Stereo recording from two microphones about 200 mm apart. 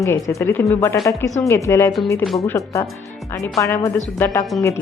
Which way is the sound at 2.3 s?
Centre (ahead or behind).